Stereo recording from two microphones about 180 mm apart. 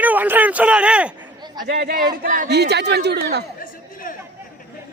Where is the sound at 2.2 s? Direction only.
50° right (ahead or behind).